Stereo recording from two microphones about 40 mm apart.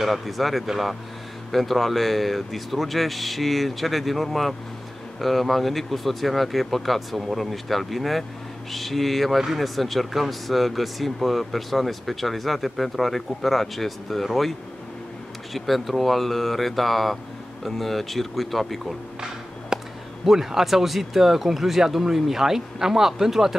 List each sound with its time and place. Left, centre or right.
0.0 s speech: centre
15.5 s speech: centre
19.7 s a sound: centre
20.2 s speech: centre